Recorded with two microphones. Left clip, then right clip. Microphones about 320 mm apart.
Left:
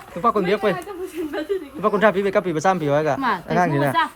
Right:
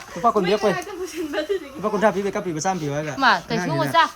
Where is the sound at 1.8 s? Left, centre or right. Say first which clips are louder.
Left 3 dB; centre.